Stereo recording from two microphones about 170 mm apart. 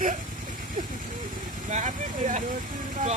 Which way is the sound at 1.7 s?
45° right (ahead or behind).